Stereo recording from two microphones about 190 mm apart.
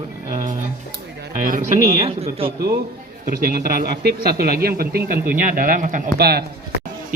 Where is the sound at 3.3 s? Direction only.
50° right (ahead or behind).